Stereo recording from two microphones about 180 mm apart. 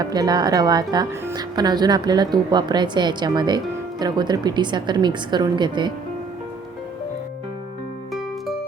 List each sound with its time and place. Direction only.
0.0 s speech: 20° right (ahead or behind)